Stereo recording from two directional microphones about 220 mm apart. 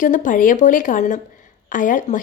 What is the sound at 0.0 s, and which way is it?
A woman's voice, 35° left (ahead or behind).